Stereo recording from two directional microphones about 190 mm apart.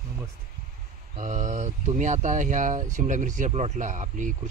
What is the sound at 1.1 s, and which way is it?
Speech, 40° right (ahead or behind).